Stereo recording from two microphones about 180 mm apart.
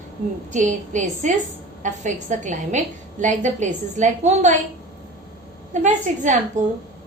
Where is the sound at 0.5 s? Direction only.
45° right (ahead or behind).